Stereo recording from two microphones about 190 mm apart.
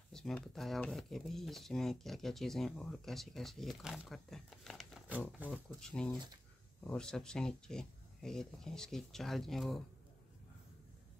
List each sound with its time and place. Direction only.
0.1 s speech: centre (ahead or behind)